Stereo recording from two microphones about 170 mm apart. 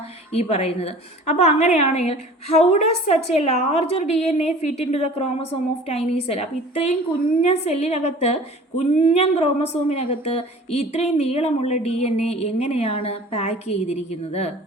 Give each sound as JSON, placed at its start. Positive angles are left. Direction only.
{"t": 0.3, "sound": "a woman's voice", "side_deg": 35}